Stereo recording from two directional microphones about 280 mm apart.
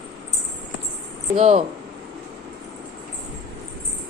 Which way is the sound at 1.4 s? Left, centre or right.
Right.